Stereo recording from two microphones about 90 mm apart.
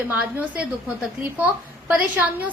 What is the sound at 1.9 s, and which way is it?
Speech, 15° right (ahead or behind).